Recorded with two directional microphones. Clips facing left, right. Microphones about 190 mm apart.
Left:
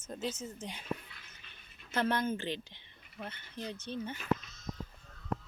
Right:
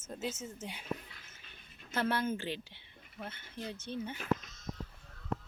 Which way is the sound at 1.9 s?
10° right (ahead or behind).